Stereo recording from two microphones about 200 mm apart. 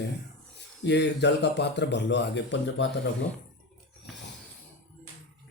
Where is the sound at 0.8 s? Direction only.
60° left (ahead or behind).